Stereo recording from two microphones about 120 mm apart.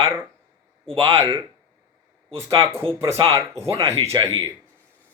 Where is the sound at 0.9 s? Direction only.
50° right (ahead or behind).